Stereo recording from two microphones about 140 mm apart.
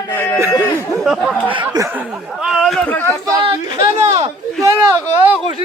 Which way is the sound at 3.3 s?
35° right (ahead or behind).